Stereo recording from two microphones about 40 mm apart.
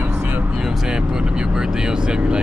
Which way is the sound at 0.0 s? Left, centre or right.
Right.